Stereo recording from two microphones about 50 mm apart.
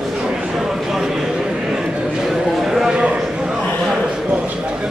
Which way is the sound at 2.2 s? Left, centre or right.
Centre.